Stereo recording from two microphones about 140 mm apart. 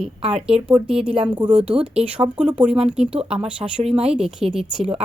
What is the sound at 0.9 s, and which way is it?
Speech, 5° right (ahead or behind).